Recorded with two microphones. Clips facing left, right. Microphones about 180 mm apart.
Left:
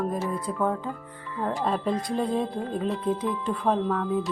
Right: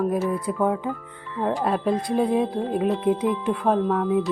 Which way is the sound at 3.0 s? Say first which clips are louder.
Right 5 dB; 20° right (ahead or behind).